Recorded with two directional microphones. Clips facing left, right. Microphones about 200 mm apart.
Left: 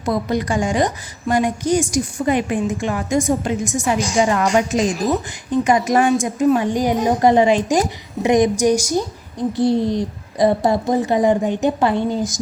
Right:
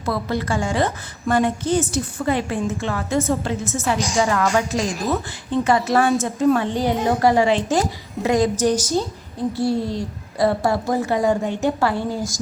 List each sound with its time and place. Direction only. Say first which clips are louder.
0.0 s a woman's voice: left 3 dB; 15° left (ahead or behind)